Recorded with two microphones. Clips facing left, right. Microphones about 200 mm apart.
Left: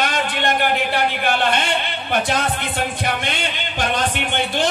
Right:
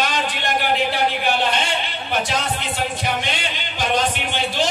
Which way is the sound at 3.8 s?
55° left (ahead or behind).